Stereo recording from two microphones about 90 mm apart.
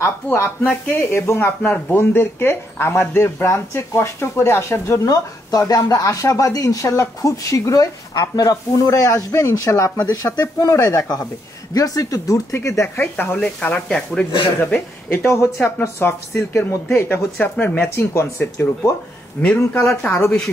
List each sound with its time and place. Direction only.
0.0 s speech: 25° left (ahead or behind)
5.0 s speech: 40° left (ahead or behind)
9.9 s speech: 50° left (ahead or behind); by 13.4 s 20° left (ahead or behind)
13.4 s speech: 10° left (ahead or behind)
14.6 s speech: 20° left (ahead or behind)
17.4 s speech: 15° left (ahead or behind)
17.8 s speech: 35° left (ahead or behind)
19.4 s speech: 15° left (ahead or behind)